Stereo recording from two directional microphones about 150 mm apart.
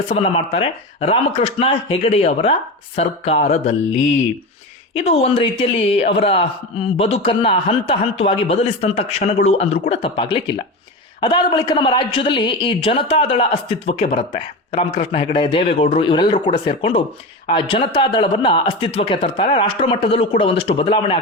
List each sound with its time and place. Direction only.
0.1 s speech: 40° left (ahead or behind)